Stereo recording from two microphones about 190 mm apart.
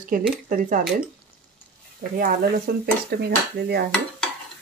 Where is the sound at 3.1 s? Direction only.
55° right (ahead or behind).